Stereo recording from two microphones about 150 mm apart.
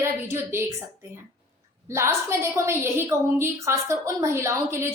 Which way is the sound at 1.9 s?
20° right (ahead or behind).